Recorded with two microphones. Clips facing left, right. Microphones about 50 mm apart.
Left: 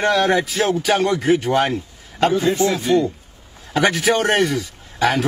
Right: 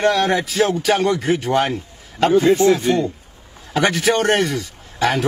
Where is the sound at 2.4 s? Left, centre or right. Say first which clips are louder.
Right 4 dB; right.